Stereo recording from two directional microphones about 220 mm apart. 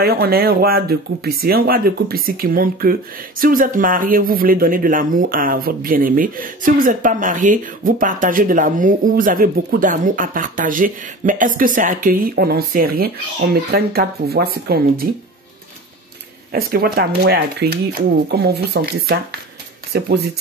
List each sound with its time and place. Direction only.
0.0 s speech: 45° right (ahead or behind)
16.5 s speech: 45° right (ahead or behind)